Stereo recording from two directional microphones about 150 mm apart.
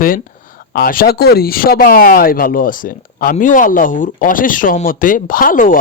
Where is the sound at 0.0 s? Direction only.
65° left (ahead or behind).